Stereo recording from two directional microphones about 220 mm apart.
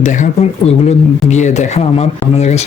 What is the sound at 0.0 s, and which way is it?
Speech, 30° left (ahead or behind).